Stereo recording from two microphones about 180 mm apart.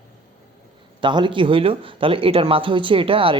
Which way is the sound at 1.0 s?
25° right (ahead or behind).